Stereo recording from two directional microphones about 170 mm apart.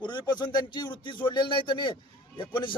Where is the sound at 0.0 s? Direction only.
25° left (ahead or behind).